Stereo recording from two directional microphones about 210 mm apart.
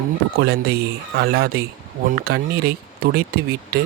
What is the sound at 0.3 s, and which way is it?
Speech, 50° right (ahead or behind).